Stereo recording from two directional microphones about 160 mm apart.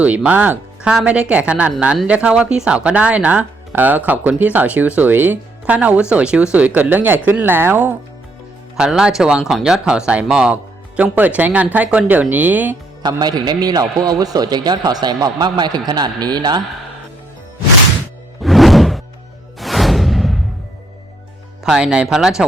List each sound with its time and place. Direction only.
0.0 s speech: 10° right (ahead or behind)
8.7 s speech: 5° right (ahead or behind)
13.0 s a man's voice: 25° right (ahead or behind)
18.4 s music: centre (ahead or behind)
21.6 s speech: 5° right (ahead or behind)